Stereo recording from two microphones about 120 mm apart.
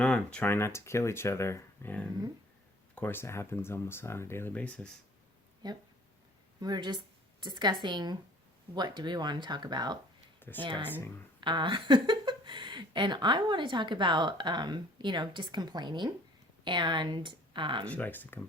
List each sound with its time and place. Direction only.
0.0 s speech: 10° left (ahead or behind)
5.6 s speech: 35° right (ahead or behind)
17.8 s speech: 15° left (ahead or behind)